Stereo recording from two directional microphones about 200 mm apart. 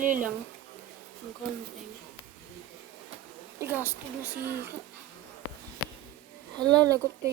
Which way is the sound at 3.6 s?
10° right (ahead or behind).